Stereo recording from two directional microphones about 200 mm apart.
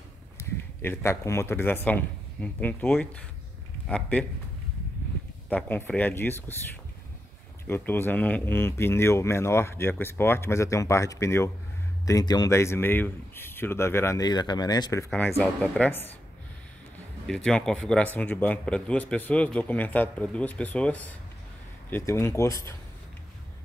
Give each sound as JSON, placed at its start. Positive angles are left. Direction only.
{"t": 0.4, "sound": "speech", "side_deg": 15}
{"t": 5.5, "sound": "speech", "side_deg": 10}
{"t": 15.0, "sound": "speech", "side_deg": 0}
{"t": 17.3, "sound": "speech", "side_deg": 5}